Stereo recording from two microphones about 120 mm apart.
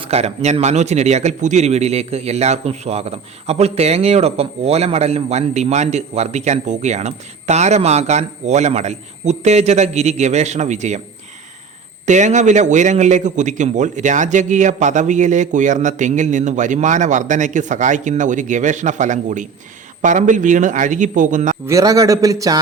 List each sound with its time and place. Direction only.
0.0 s speech: 60° right (ahead or behind); by 11.0 s 80° right
12.0 s a man's voice: 80° right
21.7 s a man's voice: 30° right (ahead or behind)